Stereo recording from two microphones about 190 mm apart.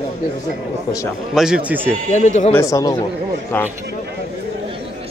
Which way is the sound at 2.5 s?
15° left (ahead or behind).